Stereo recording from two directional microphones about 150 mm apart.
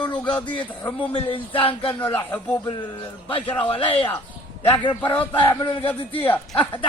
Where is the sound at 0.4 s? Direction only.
35° left (ahead or behind).